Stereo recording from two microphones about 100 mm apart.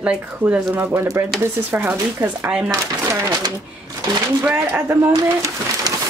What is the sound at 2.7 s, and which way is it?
Speech, 35° right (ahead or behind).